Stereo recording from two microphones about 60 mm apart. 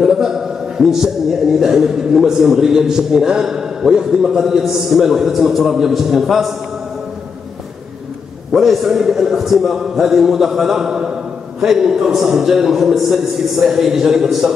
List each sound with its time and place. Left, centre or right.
0.0 s a man's voice: centre
8.5 s a man's voice: centre